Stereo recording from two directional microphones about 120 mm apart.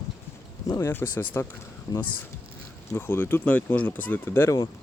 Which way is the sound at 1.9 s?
30° left (ahead or behind).